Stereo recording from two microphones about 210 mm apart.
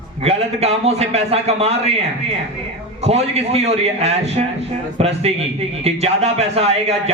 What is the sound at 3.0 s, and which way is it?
A man's voice, 30° right (ahead or behind).